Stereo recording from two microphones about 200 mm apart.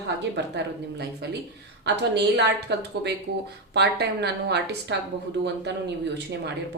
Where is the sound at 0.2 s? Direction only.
60° right (ahead or behind).